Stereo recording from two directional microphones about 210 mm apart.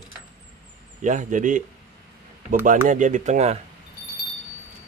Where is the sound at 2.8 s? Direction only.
35° right (ahead or behind).